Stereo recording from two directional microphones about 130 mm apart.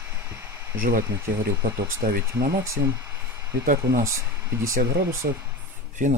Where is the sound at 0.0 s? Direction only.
15° right (ahead or behind).